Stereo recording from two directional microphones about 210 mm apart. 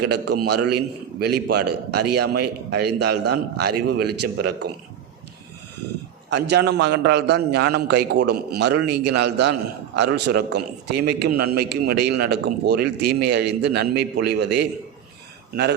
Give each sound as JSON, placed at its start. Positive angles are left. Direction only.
{"t": 0.0, "sound": "a man's voice", "side_deg": -50}
{"t": 6.3, "sound": "a man's voice", "side_deg": -55}